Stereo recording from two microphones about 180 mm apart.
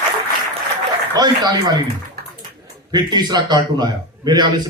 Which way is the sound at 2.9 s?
25° right (ahead or behind).